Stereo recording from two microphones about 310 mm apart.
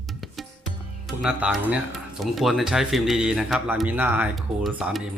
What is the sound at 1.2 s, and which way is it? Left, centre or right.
Speech, centre.